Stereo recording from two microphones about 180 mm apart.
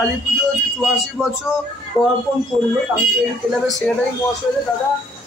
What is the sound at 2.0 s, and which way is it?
Speech, 5° left (ahead or behind).